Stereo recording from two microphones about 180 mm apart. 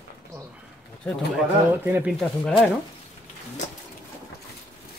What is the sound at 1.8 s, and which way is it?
Speech, 10° right (ahead or behind).